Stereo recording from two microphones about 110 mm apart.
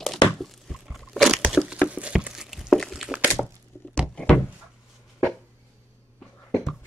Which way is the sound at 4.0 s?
5° left (ahead or behind).